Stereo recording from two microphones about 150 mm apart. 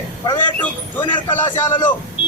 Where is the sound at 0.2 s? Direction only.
30° left (ahead or behind).